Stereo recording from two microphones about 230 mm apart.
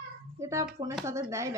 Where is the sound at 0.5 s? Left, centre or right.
Centre.